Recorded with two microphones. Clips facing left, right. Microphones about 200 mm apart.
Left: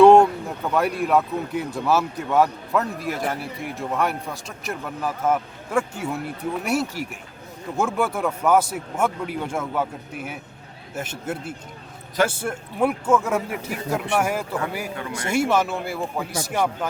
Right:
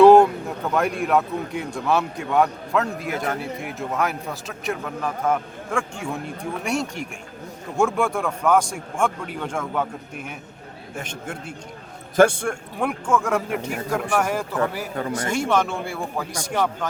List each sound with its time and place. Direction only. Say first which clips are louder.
0.0 s a sound: right 1 dB; centre (ahead or behind)
0.7 s a man's voice: left 1 dB; centre (ahead or behind)
14.9 s speech: right 5 dB; 40° right (ahead or behind)
15.3 s speech: left 3 dB; 5° left (ahead or behind)